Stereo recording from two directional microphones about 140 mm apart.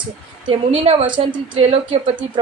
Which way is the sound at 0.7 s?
40° right (ahead or behind).